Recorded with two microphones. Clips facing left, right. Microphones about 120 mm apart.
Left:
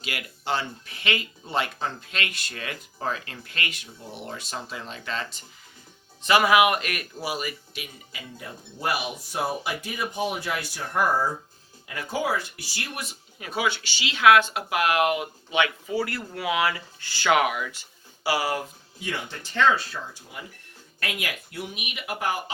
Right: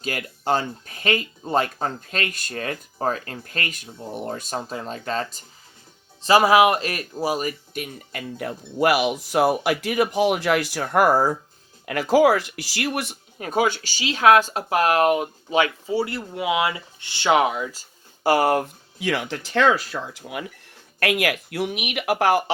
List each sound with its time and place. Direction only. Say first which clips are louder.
0.0 s speech: right 6 dB; 40° right (ahead or behind); by 13.1 s 65° right (ahead or behind)
13.4 s speech: right 6 dB; 45° right (ahead or behind); by 20.4 s 80° right
21.0 s speech: right 10 dB; 70° right (ahead or behind)